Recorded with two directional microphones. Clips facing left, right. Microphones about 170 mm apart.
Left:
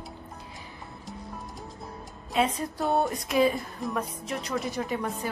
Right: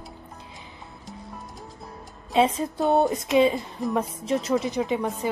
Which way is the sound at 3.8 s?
Centre (ahead or behind).